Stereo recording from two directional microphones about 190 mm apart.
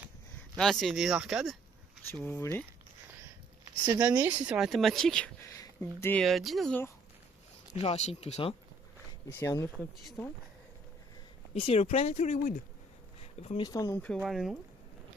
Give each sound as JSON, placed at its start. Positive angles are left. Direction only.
{"t": 0.5, "sound": "speech", "side_deg": 0}
{"t": 2.0, "sound": "speech", "side_deg": 10}
{"t": 3.8, "sound": "speech", "side_deg": -15}
{"t": 5.5, "sound": "a sound", "side_deg": 15}
{"t": 6.0, "sound": "speech", "side_deg": 10}
{"t": 7.7, "sound": "speech", "side_deg": 35}
{"t": 9.2, "sound": "speech", "side_deg": 15}
{"t": 9.7, "sound": "speech", "side_deg": 0}
{"t": 11.5, "sound": "speech", "side_deg": 30}
{"t": 13.6, "sound": "speech", "side_deg": 20}
{"t": 14.2, "sound": "speech", "side_deg": 0}